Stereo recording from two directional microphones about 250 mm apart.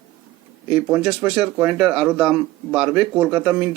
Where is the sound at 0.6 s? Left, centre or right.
Centre.